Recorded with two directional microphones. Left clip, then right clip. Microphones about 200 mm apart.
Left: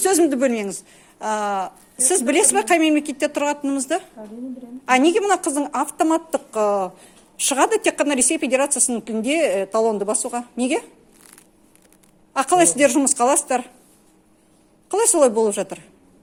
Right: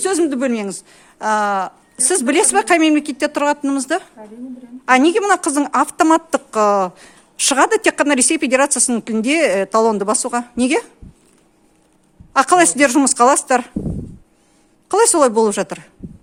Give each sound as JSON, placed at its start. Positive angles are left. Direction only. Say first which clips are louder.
{"t": 0.0, "sound": "a woman's voice", "louder": "even", "side_deg": -25}
{"t": 12.3, "sound": "a woman's voice", "louder": "right 4 dB", "side_deg": -40}
{"t": 14.8, "sound": "a woman's voice", "louder": "right 4 dB", "side_deg": -40}